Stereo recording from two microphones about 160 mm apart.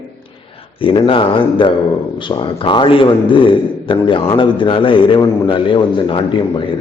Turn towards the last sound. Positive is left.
turn(degrees=35)  # may be behind; listen again after turning